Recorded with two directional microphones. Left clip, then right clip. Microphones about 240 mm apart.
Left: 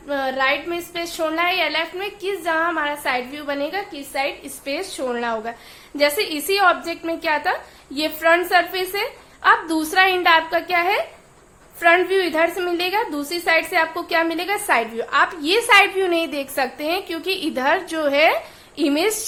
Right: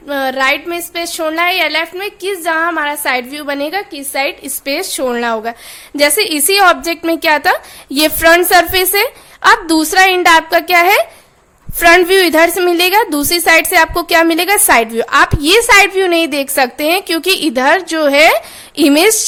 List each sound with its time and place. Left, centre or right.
0.1 s a woman's voice: right